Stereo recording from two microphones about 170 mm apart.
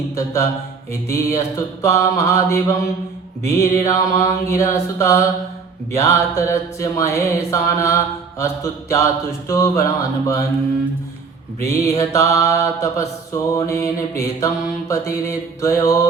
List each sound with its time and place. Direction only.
0.9 s mantra: 15° left (ahead or behind)
11.6 s mantra: 20° left (ahead or behind)